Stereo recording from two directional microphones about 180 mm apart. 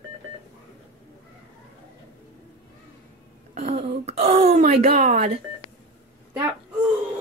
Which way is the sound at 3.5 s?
35° right (ahead or behind).